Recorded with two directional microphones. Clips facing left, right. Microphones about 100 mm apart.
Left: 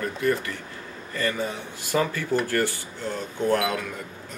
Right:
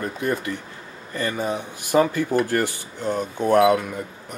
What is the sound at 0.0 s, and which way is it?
Speech, 20° right (ahead or behind).